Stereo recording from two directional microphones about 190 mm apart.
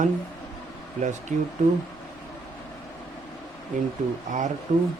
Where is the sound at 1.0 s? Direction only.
40° right (ahead or behind).